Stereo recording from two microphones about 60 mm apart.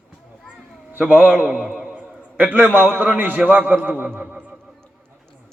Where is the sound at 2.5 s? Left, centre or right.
Right.